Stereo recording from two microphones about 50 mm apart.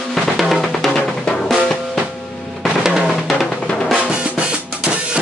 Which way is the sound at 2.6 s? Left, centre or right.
Centre.